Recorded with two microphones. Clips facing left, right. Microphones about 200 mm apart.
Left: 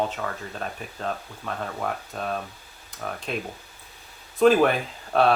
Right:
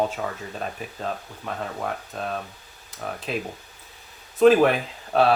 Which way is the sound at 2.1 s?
Centre (ahead or behind).